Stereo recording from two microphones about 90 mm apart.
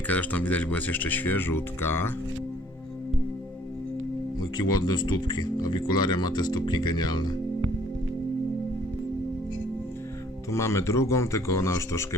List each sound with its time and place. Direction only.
0.1 s speech: 20° left (ahead or behind)
4.4 s speech: 50° left (ahead or behind)
10.5 s speech: 35° left (ahead or behind)